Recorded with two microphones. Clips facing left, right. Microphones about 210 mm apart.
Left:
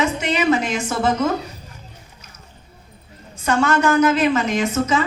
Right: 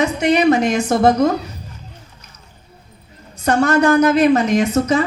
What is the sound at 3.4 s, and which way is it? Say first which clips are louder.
A woman's voice: right 4 dB; 40° right (ahead or behind).